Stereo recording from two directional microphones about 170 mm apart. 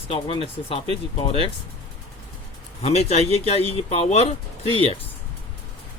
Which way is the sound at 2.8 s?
40° left (ahead or behind).